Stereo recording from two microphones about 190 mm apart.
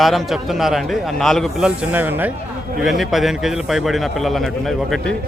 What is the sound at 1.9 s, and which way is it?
A man's voice, 10° right (ahead or behind).